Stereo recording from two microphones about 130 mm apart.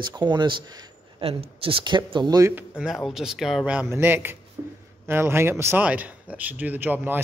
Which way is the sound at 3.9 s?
20° right (ahead or behind).